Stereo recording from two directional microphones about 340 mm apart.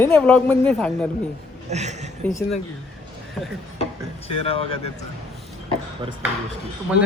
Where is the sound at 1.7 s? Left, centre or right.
Centre.